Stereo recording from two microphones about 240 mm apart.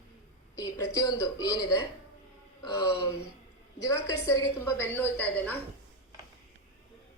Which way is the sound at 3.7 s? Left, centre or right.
Centre.